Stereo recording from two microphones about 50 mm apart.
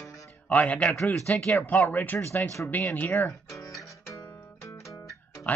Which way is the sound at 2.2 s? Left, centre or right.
Left.